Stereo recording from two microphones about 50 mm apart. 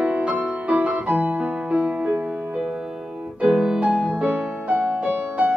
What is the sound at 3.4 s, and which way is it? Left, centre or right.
Music, centre.